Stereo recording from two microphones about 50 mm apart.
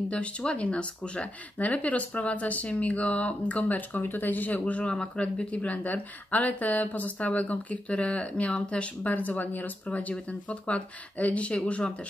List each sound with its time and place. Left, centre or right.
0.6 s speech: left
9.0 s speech: left